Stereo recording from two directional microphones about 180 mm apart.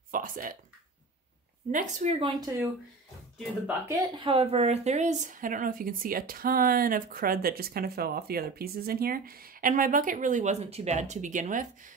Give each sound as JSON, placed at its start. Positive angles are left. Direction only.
{"t": 0.1, "sound": "a sound", "side_deg": -50}
{"t": 1.7, "sound": "speech", "side_deg": -45}
{"t": 3.6, "sound": "speech", "side_deg": -15}